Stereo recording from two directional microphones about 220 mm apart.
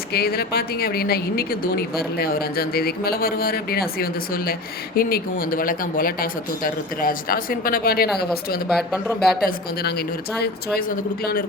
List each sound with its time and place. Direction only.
0.1 s a woman's voice: 45° left (ahead or behind)
8.7 s speech: centre (ahead or behind)
9.4 s a woman's voice: 45° left (ahead or behind)